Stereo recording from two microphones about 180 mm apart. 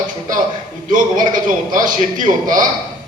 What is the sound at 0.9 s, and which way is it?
A man's voice, 45° right (ahead or behind).